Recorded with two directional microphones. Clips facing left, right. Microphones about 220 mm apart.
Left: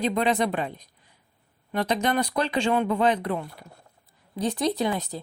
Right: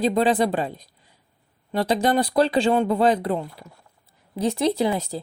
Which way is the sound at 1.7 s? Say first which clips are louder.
Right 4 dB; 30° right (ahead or behind).